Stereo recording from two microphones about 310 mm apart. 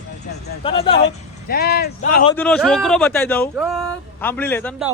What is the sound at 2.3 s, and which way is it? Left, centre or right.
Speech, centre.